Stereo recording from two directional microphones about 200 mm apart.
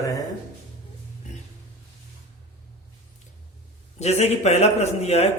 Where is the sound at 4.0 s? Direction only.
30° left (ahead or behind).